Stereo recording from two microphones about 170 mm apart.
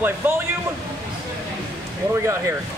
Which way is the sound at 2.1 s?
15° right (ahead or behind).